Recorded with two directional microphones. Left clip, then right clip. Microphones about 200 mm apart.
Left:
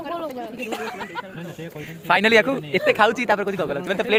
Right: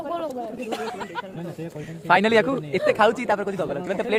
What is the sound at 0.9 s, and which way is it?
Speech, 55° right (ahead or behind).